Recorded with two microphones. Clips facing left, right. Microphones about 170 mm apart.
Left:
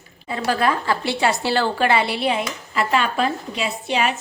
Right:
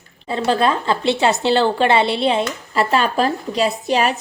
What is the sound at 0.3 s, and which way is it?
A woman's voice, 25° right (ahead or behind).